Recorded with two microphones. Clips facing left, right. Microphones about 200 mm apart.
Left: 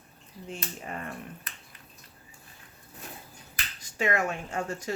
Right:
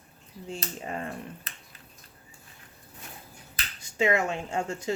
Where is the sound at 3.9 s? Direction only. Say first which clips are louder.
Right 3 dB; 25° right (ahead or behind).